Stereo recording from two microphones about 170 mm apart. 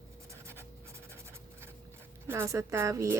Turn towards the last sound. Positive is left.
turn(degrees=-15)  # may be behind; listen again after turning